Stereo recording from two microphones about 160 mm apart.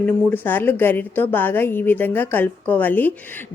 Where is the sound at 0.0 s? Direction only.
10° left (ahead or behind).